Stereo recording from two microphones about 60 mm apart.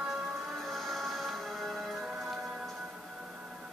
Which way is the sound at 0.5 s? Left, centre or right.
Centre.